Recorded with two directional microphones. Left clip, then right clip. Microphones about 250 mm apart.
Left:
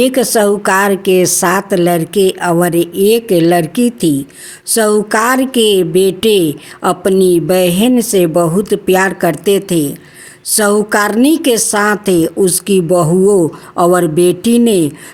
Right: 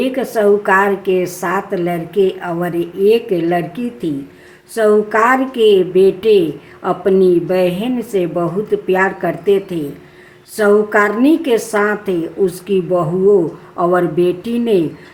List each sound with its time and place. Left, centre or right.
0.0 s a woman's voice: left